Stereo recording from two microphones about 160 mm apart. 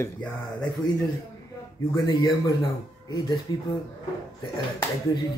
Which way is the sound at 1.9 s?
20° left (ahead or behind).